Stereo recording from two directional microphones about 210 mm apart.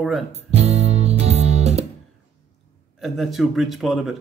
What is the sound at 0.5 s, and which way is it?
Music, 30° right (ahead or behind).